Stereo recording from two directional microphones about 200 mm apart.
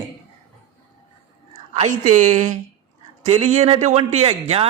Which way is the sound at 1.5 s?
35° right (ahead or behind).